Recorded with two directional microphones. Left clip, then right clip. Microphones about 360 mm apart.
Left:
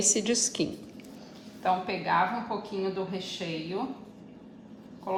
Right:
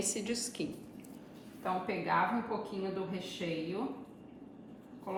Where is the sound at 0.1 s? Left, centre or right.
Centre.